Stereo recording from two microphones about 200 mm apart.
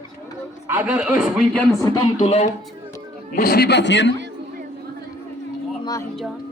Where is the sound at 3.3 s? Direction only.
50° left (ahead or behind).